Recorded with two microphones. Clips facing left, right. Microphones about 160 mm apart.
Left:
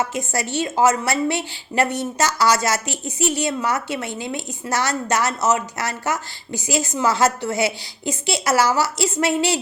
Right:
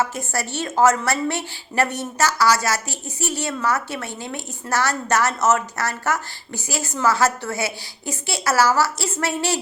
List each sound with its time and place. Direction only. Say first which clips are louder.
0.0 s a woman's voice: left 1 dB; 20° left (ahead or behind)